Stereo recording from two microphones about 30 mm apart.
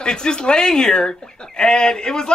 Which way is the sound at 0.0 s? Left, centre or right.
Left.